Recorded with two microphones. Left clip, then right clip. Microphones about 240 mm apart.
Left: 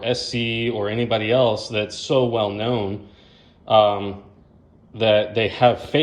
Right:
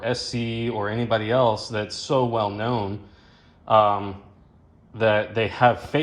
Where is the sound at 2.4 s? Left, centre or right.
Centre.